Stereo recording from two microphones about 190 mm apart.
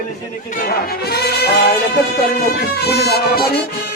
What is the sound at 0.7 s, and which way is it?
Music, 55° left (ahead or behind).